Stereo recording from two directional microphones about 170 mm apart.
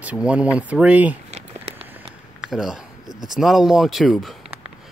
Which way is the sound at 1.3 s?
40° right (ahead or behind).